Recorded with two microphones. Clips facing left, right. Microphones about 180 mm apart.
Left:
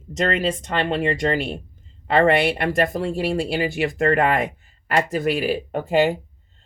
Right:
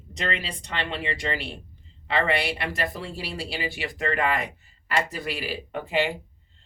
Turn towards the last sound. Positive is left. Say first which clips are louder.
# left 7 dB
turn(degrees=45)  # may be behind; listen again after turning